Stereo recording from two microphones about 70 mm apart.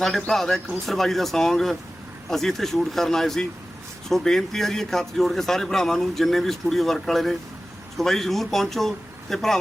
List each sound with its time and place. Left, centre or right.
0.3 s speech: centre